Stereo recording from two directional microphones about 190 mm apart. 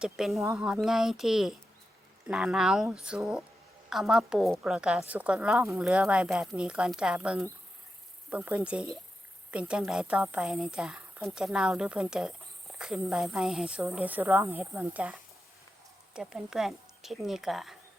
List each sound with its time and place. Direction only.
0.0 s a woman's voice: centre (ahead or behind)